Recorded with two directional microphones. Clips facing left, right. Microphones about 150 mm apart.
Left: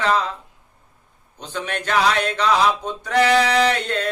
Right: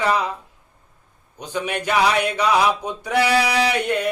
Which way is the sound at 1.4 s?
10° right (ahead or behind).